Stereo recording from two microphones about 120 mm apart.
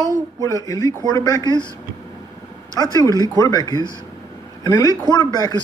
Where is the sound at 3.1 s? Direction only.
30° left (ahead or behind).